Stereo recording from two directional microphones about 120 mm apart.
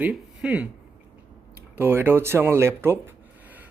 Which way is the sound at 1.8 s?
15° right (ahead or behind).